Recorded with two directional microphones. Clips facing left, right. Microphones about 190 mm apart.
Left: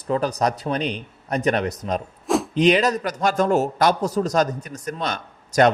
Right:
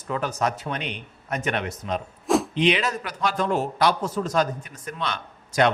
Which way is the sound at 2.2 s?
Centre (ahead or behind).